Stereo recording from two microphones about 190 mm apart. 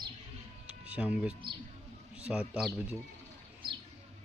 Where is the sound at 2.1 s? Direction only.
5° right (ahead or behind).